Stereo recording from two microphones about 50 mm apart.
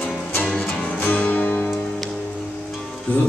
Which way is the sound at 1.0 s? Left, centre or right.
Left.